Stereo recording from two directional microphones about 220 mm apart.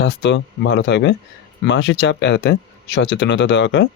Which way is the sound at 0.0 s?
55° left (ahead or behind).